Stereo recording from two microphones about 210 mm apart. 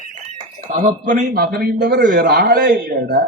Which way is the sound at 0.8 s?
40° right (ahead or behind).